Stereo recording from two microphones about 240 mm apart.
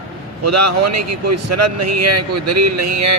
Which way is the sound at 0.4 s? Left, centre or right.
Right.